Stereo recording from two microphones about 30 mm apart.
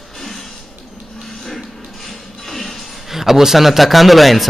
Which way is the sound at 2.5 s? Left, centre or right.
Centre.